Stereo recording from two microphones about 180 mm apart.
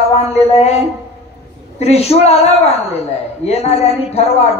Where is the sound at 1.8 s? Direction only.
35° left (ahead or behind).